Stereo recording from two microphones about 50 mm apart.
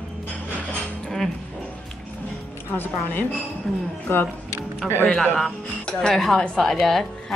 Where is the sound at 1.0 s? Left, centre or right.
Centre.